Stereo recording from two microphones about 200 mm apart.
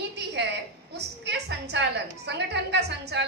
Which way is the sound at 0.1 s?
60° right (ahead or behind).